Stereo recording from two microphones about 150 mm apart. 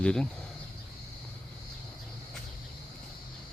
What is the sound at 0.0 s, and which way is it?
Speech, 5° left (ahead or behind).